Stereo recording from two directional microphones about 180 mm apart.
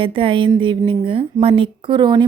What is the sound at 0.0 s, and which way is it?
Speech, 30° right (ahead or behind).